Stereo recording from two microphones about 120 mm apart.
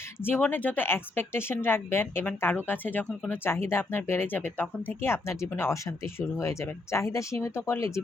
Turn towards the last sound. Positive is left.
turn(degrees=25)  # may be behind; listen again after turning